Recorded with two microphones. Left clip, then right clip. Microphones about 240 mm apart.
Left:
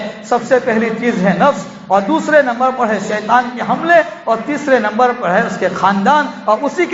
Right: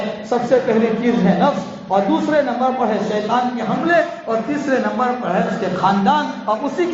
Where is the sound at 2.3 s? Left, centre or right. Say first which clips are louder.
Left 8 dB; left.